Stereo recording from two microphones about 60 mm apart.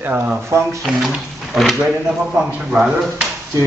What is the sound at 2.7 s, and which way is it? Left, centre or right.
Speech, centre.